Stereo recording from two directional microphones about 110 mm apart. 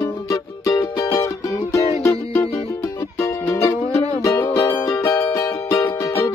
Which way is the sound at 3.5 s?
25° left (ahead or behind).